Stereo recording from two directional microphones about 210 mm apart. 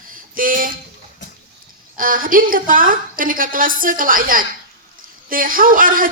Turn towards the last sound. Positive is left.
turn(degrees=-40)  # may be behind; listen again after turning